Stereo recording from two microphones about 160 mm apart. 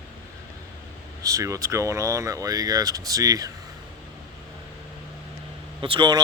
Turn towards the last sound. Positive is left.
turn(degrees=-25)  # may be behind; listen again after turning